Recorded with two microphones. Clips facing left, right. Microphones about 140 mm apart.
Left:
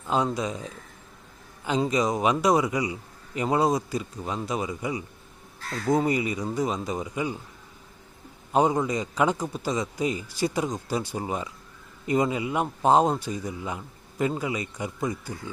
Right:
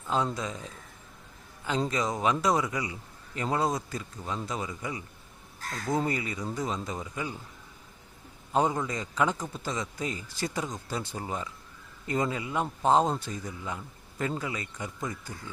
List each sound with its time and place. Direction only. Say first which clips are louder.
0.1 s a man's voice: left 4 dB; 15° left (ahead or behind)
8.5 s a man's voice: left 5 dB; 15° left (ahead or behind)